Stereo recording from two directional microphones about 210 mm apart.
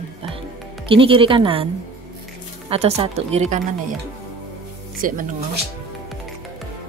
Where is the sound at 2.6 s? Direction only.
30° right (ahead or behind).